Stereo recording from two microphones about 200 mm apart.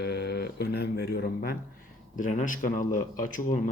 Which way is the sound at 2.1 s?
40° left (ahead or behind).